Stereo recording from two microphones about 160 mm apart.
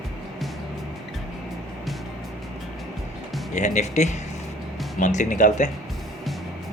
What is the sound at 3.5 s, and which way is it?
Speech, 45° left (ahead or behind).